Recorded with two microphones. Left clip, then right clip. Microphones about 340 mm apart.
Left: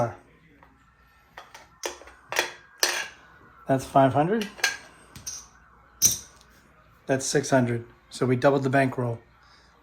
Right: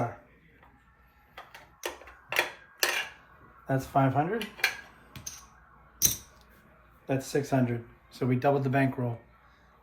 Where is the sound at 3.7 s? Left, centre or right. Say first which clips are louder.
Left 7 dB; left.